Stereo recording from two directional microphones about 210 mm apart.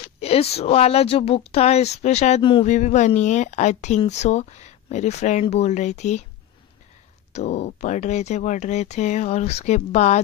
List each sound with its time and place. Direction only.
0.2 s speech: 30° left (ahead or behind)
7.3 s speech: 30° left (ahead or behind)